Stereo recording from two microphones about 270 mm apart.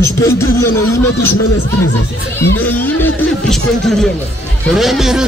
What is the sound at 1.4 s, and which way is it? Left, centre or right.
Speech, left.